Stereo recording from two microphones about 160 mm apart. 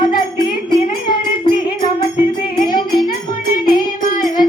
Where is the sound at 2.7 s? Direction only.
25° left (ahead or behind).